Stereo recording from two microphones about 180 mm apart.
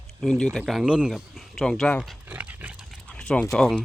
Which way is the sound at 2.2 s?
10° right (ahead or behind).